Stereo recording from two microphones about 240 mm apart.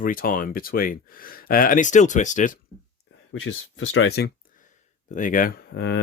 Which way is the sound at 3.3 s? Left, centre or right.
Left.